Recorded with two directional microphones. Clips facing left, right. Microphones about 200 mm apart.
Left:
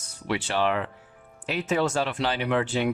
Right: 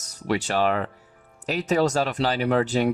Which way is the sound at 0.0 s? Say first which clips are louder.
Right 4 dB; 40° right (ahead or behind).